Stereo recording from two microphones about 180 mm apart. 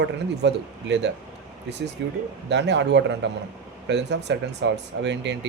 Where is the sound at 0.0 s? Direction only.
75° right (ahead or behind).